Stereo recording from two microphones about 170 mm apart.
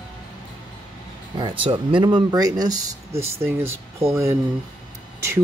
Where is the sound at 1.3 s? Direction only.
30° right (ahead or behind).